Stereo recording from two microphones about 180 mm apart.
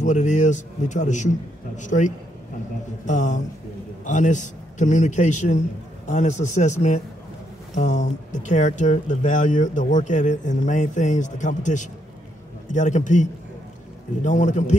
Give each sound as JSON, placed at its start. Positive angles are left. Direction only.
{"t": 0.0, "sound": "a man's voice", "side_deg": 40}